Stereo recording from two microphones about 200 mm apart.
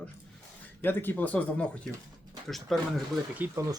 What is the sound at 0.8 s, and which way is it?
Speech, 10° left (ahead or behind).